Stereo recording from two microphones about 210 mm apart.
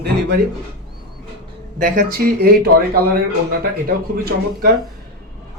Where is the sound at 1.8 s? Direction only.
40° right (ahead or behind).